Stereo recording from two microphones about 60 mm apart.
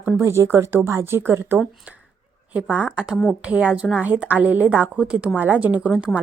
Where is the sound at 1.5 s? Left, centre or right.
Right.